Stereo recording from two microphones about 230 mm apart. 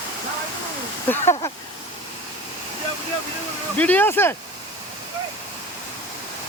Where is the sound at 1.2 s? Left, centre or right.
Left.